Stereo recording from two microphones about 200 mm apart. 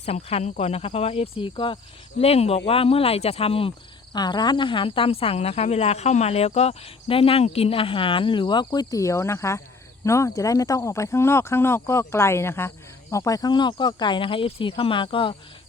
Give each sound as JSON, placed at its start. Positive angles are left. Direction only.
{"t": 0.0, "sound": "speech", "side_deg": 30}